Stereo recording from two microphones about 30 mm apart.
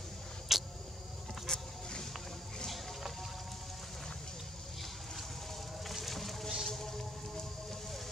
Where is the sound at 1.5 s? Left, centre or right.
Left.